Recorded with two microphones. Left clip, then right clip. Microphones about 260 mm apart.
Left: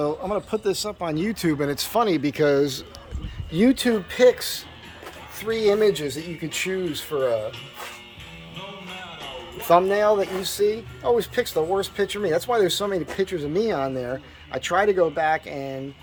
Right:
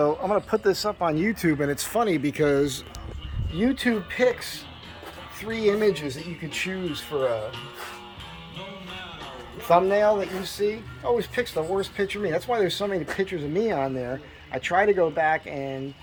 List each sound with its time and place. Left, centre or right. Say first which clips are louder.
0.0 s speech: right 2 dB; centre
3.5 s speech: left 6 dB; left
3.8 s speech: left 5 dB; centre
5.4 s speech: left 3 dB; centre
9.6 s speech: left 1 dB; centre